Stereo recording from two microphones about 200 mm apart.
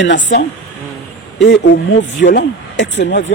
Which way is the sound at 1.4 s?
55° left (ahead or behind).